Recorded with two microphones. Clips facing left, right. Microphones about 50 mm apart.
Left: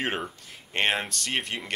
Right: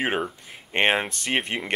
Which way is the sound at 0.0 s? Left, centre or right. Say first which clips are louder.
Right 4 dB; centre.